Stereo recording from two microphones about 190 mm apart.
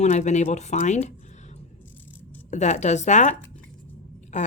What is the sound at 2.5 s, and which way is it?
Speech, 40° left (ahead or behind).